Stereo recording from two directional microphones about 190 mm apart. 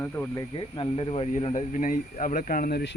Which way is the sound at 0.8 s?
30° left (ahead or behind).